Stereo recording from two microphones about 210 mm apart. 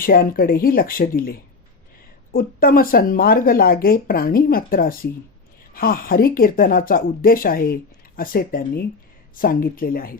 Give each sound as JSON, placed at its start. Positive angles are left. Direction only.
{"t": 0.0, "sound": "speech", "side_deg": 45}